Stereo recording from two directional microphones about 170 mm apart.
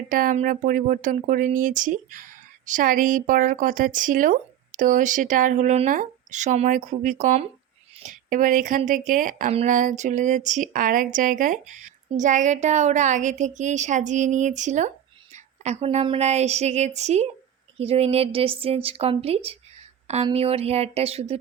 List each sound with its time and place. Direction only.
0.1 s a woman's voice: 50° right (ahead or behind); by 21.3 s 35° right (ahead or behind)